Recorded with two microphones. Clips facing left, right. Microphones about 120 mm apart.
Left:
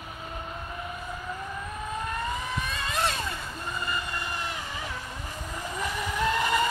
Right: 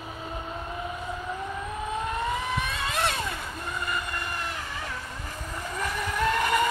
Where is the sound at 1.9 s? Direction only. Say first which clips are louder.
Right 2 dB; 15° right (ahead or behind).